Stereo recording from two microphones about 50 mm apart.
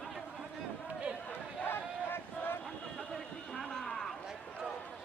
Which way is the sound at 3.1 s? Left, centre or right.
Centre.